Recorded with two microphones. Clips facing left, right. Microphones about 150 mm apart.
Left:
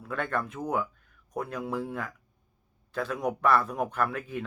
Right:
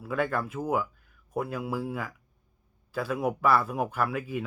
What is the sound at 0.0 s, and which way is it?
Speech, 5° right (ahead or behind).